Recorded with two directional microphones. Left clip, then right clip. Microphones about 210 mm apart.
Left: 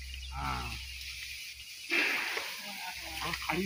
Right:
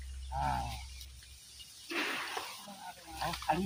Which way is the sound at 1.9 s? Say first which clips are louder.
Left 6 dB; 55° right (ahead or behind).